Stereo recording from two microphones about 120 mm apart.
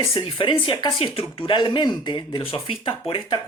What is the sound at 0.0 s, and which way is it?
Speech, 50° left (ahead or behind).